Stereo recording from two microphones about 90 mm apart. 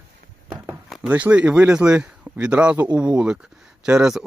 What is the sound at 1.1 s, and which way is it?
Speech, 15° right (ahead or behind).